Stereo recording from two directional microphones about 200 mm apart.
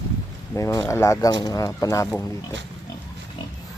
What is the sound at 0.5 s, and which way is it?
Speech, 15° left (ahead or behind).